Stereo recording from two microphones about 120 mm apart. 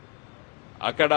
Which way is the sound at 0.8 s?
20° left (ahead or behind).